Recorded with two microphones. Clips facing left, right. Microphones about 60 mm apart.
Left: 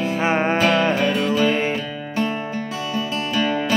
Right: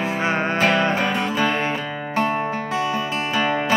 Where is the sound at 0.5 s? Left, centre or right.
Right.